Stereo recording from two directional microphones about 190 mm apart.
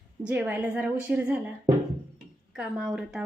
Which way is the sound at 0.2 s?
5° right (ahead or behind).